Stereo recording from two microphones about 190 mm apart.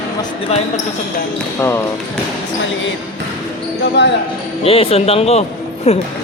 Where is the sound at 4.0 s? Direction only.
65° left (ahead or behind).